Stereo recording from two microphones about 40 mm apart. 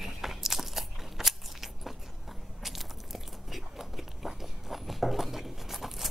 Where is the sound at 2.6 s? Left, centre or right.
Centre.